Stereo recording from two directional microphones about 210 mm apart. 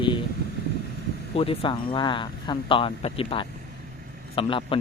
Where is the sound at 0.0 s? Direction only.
25° left (ahead or behind).